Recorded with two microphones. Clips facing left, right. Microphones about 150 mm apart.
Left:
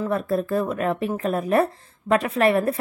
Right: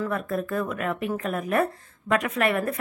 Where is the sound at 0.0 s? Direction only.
30° left (ahead or behind).